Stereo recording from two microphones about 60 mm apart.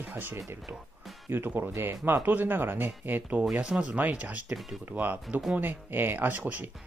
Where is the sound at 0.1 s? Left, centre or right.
Right.